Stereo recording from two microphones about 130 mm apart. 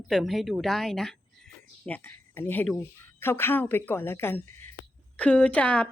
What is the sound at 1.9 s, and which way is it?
A woman's voice, 15° left (ahead or behind).